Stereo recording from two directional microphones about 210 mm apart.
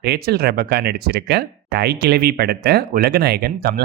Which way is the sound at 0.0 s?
50° right (ahead or behind).